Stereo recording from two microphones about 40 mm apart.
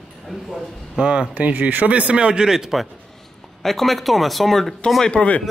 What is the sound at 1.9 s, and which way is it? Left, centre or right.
Speech, right.